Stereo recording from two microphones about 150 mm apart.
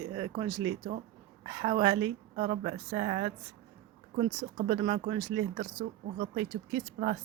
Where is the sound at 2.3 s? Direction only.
50° right (ahead or behind).